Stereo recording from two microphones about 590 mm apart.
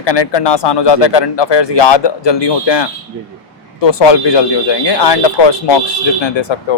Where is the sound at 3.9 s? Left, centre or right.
Left.